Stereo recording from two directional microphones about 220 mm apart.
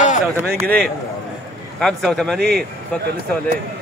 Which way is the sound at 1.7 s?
Centre (ahead or behind).